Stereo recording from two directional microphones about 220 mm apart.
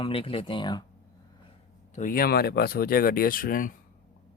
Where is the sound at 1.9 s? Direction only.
35° left (ahead or behind).